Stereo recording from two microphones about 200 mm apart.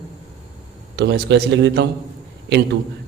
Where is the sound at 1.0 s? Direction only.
60° right (ahead or behind).